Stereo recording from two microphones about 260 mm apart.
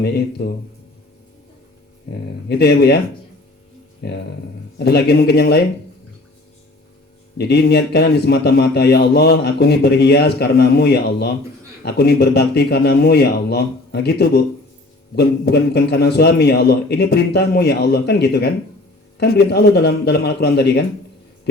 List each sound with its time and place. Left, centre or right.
0.0 s a man's voice: left
2.5 s a man's voice: left
4.0 s a man's voice: left
7.3 s a man's voice: left